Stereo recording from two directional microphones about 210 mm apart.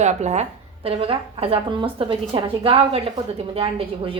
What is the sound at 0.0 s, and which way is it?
A woman's voice, 35° right (ahead or behind).